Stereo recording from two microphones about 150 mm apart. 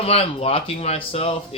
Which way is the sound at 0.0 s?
40° left (ahead or behind).